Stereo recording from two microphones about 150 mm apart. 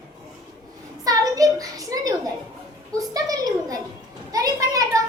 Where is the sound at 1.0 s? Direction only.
25° right (ahead or behind).